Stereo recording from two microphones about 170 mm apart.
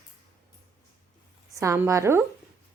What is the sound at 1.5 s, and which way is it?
Speech, 15° right (ahead or behind).